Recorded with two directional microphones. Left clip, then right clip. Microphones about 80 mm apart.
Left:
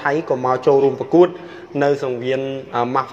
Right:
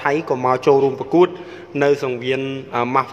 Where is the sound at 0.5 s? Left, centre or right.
Right.